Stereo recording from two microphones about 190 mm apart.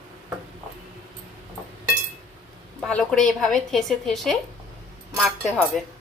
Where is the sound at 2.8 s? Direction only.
5° left (ahead or behind).